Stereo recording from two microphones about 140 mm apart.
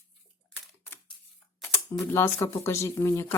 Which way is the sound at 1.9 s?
20° left (ahead or behind).